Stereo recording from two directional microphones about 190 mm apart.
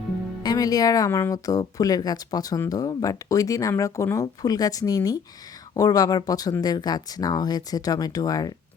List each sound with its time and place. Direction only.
0.4 s speech: 20° left (ahead or behind)